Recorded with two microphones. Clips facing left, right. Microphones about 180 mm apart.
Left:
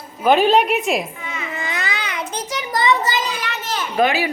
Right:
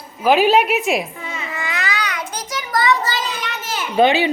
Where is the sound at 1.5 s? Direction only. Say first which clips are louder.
Right 2 dB; 25° left (ahead or behind).